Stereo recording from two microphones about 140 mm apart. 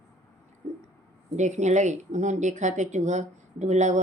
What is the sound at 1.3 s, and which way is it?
Speech, 55° right (ahead or behind).